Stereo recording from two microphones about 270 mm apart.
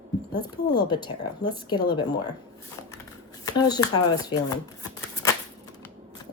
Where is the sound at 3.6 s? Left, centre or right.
Centre.